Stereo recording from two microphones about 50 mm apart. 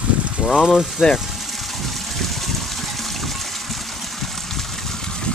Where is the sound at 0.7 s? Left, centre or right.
Centre.